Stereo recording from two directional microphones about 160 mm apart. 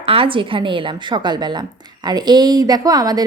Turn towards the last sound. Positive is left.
turn(degrees=-25)  # may be behind; listen again after turning